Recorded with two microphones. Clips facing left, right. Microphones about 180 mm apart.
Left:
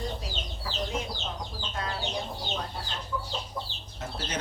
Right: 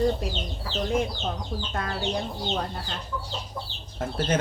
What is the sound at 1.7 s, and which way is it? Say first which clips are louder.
Speech: right 3 dB; 60° right (ahead or behind).